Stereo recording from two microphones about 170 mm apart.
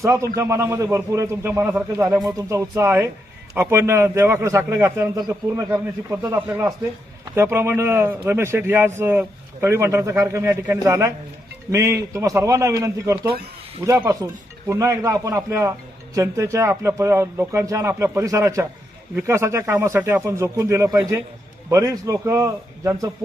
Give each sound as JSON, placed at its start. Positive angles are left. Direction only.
{"t": 0.0, "sound": "a man's voice", "side_deg": -15}